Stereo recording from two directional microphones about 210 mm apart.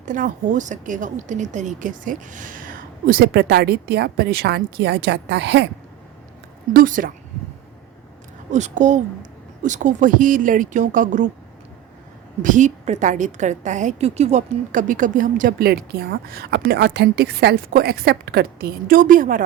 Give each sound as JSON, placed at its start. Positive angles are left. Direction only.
{"t": 0.0, "sound": "speech", "side_deg": -40}
{"t": 6.7, "sound": "a woman's voice", "side_deg": -40}
{"t": 8.5, "sound": "a woman's voice", "side_deg": -35}
{"t": 12.4, "sound": "a woman's voice", "side_deg": -35}